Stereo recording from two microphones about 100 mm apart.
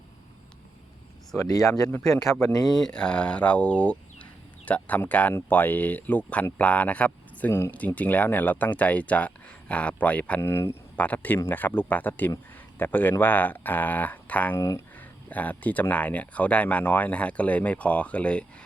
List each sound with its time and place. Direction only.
1.4 s speech: 35° left (ahead or behind)
2.0 s speech: 5° left (ahead or behind)
2.4 s speech: 40° left (ahead or behind)
2.8 s speech: 10° left (ahead or behind)
10.4 s speech: 25° left (ahead or behind)
10.9 s speech: 15° left (ahead or behind)